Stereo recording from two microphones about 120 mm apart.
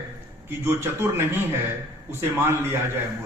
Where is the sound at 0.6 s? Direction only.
20° right (ahead or behind).